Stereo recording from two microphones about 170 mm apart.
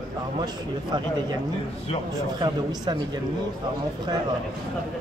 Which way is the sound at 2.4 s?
25° right (ahead or behind).